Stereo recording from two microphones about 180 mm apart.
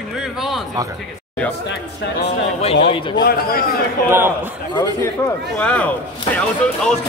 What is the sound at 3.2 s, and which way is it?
Speech, 55° left (ahead or behind).